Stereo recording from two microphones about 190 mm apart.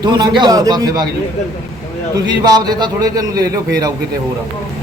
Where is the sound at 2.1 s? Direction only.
20° right (ahead or behind).